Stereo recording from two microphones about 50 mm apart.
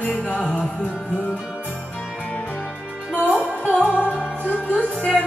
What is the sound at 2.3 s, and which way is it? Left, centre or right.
Music, left.